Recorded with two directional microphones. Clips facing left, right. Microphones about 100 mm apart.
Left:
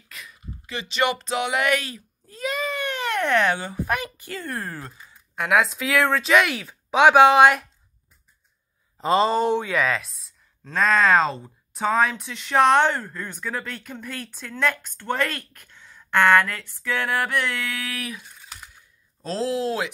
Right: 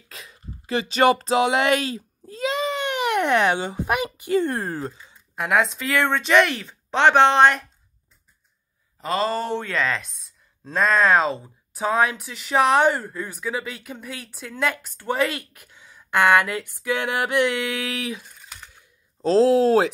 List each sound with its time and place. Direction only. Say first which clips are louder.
0.1 s speech: even; 30° right (ahead or behind)
5.3 s speech: even; centre (ahead or behind)
8.9 s speech: left 4 dB; 25° left (ahead or behind)
9.8 s speech: left 1 dB; centre (ahead or behind); by 18.2 s 25° right (ahead or behind)
18.2 s a sound: even; centre (ahead or behind)
19.2 s speech: right 9 dB; 35° right (ahead or behind)